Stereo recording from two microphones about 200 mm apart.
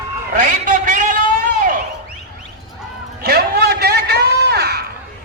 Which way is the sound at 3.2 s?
50° right (ahead or behind).